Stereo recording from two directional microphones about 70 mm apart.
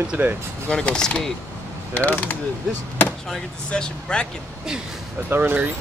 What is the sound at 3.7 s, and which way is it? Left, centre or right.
Speech, centre.